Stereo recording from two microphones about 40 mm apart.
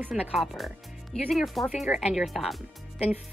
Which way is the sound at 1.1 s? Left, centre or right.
Centre.